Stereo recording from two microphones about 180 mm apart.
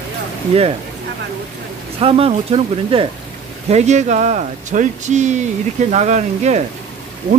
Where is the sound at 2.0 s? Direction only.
35° right (ahead or behind).